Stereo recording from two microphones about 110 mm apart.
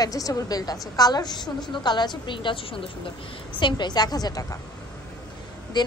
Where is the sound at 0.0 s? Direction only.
35° left (ahead or behind).